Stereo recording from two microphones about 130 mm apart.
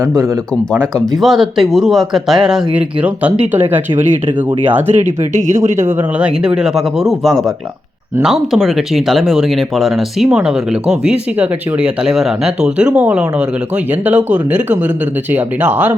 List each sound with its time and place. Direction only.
0.9 s speech: centre (ahead or behind)
5.5 s speech: 20° right (ahead or behind)
6.2 s speech: 5° right (ahead or behind)